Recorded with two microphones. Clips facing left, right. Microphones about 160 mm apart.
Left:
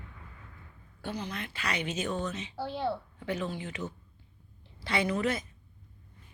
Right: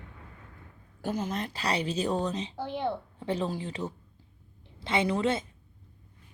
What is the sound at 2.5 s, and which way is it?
Speech, 20° right (ahead or behind).